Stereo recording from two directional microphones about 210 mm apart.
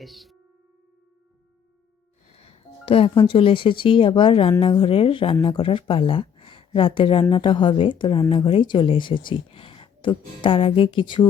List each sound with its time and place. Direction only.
0.0 s speech: centre (ahead or behind)
2.4 s speech: 25° left (ahead or behind)